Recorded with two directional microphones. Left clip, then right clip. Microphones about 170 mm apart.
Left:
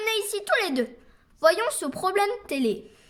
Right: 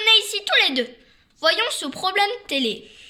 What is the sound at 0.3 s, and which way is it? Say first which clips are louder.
A woman's voice: right 5 dB; 50° left (ahead or behind).